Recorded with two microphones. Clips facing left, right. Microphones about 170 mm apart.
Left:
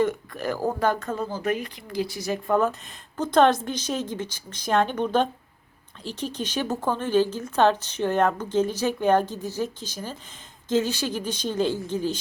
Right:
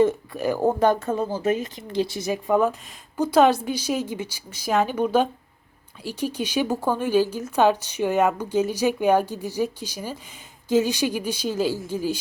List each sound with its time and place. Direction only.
0.3 s a woman's voice: 15° right (ahead or behind)
2.3 s a woman's voice: 10° right (ahead or behind)